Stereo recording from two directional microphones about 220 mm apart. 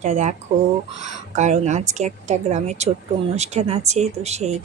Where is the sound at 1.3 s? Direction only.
35° right (ahead or behind).